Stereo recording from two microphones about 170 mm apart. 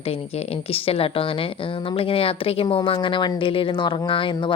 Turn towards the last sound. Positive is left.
turn(degrees=30)  # may be behind; listen again after turning